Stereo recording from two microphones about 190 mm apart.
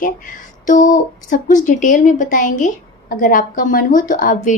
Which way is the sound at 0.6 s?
40° left (ahead or behind).